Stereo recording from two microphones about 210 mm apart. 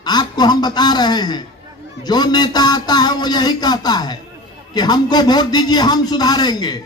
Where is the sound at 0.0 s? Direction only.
20° left (ahead or behind).